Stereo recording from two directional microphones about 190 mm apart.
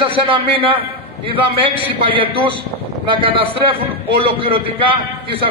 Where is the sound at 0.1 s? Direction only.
30° right (ahead or behind).